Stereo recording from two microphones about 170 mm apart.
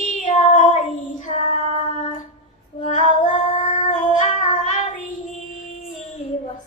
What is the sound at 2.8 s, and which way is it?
Female singing, 45° left (ahead or behind).